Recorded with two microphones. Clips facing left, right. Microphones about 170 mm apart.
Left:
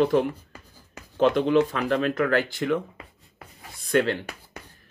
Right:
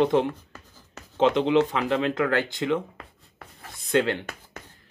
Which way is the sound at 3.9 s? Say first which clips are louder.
Left 1 dB; 20° right (ahead or behind).